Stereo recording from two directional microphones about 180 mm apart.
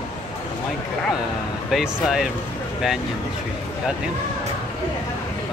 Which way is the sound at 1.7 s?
Centre (ahead or behind).